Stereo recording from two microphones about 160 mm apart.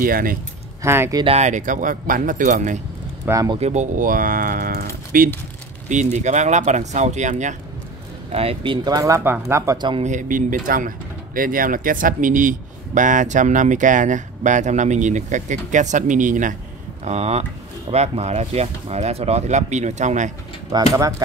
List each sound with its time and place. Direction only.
0.0 s speech: 60° right (ahead or behind)
0.8 s speech: 15° right (ahead or behind)
1.2 s speech: 45° right (ahead or behind)
3.3 s speech: 20° right (ahead or behind)
3.5 s speech: 45° right (ahead or behind); by 5.3 s 65° right (ahead or behind)
6.1 s speech: 45° right (ahead or behind)
8.3 s speech: 35° right (ahead or behind)
8.8 s speech: 20° right (ahead or behind)
10.0 s speech: 55° right (ahead or behind)
17.0 s speech: 45° right (ahead or behind)
20.7 s speech: 25° right (ahead or behind)